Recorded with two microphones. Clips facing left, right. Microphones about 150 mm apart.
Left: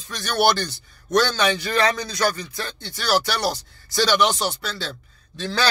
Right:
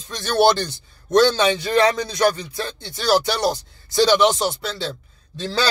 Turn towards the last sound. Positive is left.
turn(degrees=-25)  # may be behind; listen again after turning